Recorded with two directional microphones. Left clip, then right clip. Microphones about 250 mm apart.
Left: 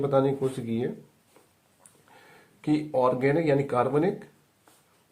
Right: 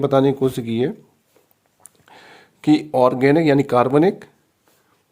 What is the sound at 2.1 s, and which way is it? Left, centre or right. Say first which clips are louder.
Speech: right 9 dB; right.